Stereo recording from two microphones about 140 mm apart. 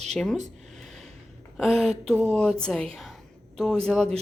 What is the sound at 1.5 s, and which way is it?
Speech, centre (ahead or behind).